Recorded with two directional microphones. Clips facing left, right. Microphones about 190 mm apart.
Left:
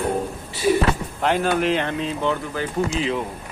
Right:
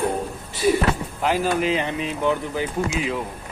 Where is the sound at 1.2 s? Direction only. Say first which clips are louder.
Left 1 dB; 5° right (ahead or behind).